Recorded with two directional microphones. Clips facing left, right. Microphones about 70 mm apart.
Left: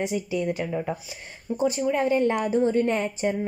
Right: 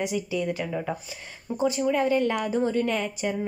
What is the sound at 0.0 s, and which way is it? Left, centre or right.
Speech, left.